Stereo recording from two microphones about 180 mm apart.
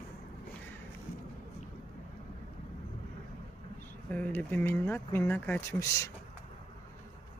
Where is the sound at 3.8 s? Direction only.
10° left (ahead or behind).